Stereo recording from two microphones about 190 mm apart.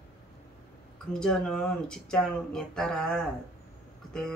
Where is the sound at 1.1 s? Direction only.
5° left (ahead or behind).